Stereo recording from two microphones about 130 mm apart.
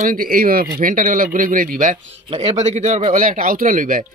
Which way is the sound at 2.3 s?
55° right (ahead or behind).